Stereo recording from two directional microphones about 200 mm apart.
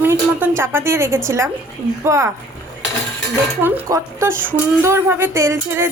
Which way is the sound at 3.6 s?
15° right (ahead or behind).